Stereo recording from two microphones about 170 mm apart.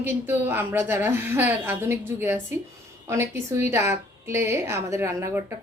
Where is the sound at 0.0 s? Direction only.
15° right (ahead or behind).